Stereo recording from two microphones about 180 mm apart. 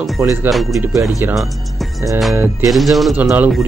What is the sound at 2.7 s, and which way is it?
Speech, centre (ahead or behind).